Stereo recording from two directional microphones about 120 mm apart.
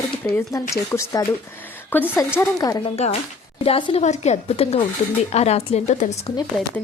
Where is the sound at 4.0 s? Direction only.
70° left (ahead or behind).